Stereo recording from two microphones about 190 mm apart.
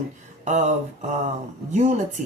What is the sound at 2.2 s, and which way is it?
Speech, 40° right (ahead or behind).